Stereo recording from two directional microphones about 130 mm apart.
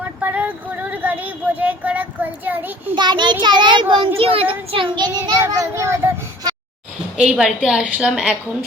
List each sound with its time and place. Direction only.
0.2 s child singing: 10° right (ahead or behind)
2.9 s a child's voice: 35° right (ahead or behind)
5.4 s a child's voice: 20° right (ahead or behind)
7.2 s a woman's voice: 5° right (ahead or behind)